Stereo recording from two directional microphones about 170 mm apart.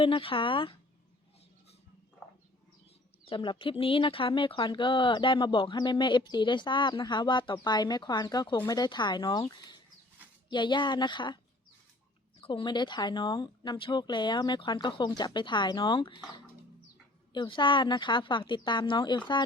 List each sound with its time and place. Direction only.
0.0 s speech: 30° left (ahead or behind)
3.2 s speech: 30° left (ahead or behind)
12.4 s speech: 30° left (ahead or behind)
17.3 s speech: 30° left (ahead or behind)